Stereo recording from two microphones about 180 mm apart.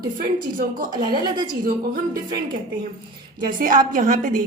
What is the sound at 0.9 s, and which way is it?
Speech, 25° right (ahead or behind).